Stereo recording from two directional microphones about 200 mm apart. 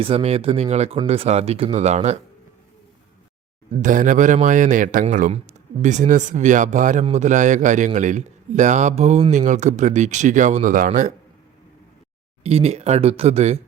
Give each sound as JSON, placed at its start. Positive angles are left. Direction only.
{"t": 0.0, "sound": "speech", "side_deg": -30}
{"t": 3.7, "sound": "speech", "side_deg": -40}
{"t": 12.4, "sound": "speech", "side_deg": -30}